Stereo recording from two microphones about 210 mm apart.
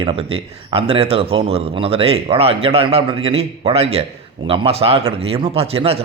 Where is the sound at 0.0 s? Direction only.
25° right (ahead or behind).